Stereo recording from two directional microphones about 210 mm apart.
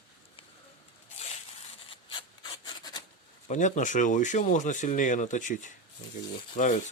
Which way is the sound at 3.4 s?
35° left (ahead or behind).